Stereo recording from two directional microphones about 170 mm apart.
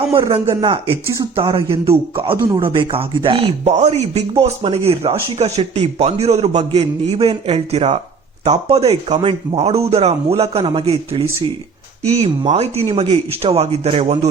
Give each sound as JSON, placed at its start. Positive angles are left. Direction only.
{"t": 0.3, "sound": "speech", "side_deg": -30}
{"t": 2.3, "sound": "speech", "side_deg": -15}
{"t": 2.6, "sound": "speech", "side_deg": -30}